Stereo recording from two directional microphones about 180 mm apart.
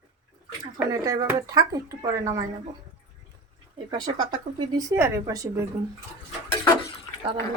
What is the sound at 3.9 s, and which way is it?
Speech, 25° right (ahead or behind).